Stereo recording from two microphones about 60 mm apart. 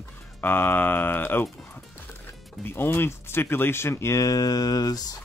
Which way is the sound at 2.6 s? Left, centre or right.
Left.